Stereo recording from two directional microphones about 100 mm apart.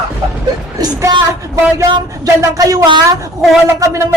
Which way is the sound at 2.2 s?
35° right (ahead or behind).